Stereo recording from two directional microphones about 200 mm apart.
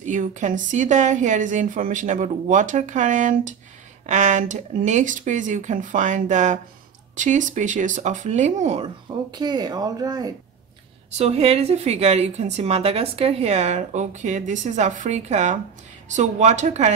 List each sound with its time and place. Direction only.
0.0 s a woman's voice: 40° right (ahead or behind); by 10.3 s 20° right (ahead or behind)
11.1 s a woman's voice: 30° right (ahead or behind)